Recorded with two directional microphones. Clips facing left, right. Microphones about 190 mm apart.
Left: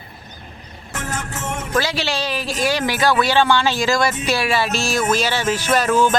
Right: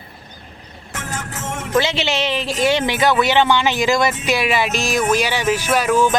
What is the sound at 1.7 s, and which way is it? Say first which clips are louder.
Speech: right 3 dB; 20° right (ahead or behind).